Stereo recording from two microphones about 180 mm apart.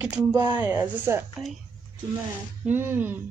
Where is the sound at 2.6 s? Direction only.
10° right (ahead or behind).